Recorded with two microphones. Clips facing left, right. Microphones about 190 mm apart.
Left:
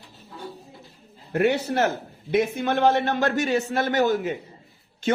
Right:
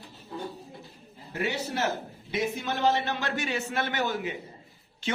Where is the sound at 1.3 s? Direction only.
55° left (ahead or behind).